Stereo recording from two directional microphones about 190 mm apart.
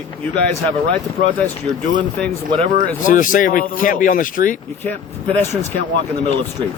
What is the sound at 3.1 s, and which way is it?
Speech, 45° left (ahead or behind).